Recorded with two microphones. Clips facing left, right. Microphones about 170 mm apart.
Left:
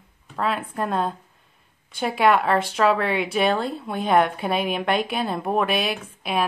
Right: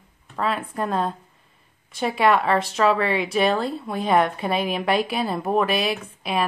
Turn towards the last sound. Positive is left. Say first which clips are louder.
# even
turn(degrees=0)  # may be behind; listen again after turning